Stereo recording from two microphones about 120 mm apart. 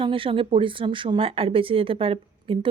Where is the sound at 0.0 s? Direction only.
45° right (ahead or behind).